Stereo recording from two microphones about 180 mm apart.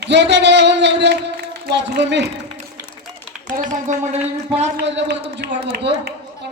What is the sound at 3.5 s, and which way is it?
Speech, 45° right (ahead or behind).